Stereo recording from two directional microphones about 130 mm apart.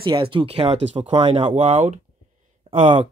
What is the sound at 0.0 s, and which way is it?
Speech, 40° right (ahead or behind).